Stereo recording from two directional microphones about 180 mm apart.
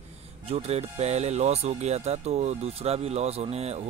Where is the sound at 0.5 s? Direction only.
35° right (ahead or behind).